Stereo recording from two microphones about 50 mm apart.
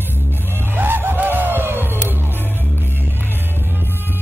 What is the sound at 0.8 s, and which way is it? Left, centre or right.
Music, right.